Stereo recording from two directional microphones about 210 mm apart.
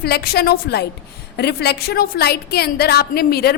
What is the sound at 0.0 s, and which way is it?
A woman's voice, 50° left (ahead or behind).